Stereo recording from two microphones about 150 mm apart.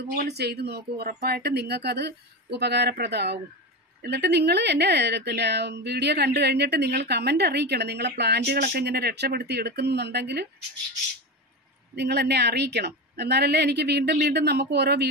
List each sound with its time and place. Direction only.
0.1 s speech: 90° right
11.9 s speech: 90° right